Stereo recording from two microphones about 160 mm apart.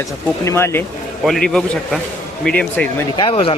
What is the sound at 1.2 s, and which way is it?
A man's voice, 5° left (ahead or behind).